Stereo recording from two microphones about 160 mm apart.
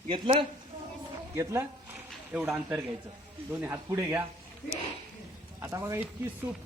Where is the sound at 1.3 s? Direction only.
20° right (ahead or behind).